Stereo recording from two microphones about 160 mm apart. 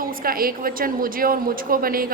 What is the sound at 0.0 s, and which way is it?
A woman's voice, 65° right (ahead or behind).